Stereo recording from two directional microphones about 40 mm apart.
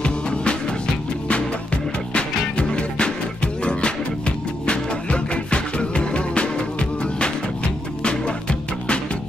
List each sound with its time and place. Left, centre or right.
0.0 s music: left
2.1 s music: left
4.6 s music: left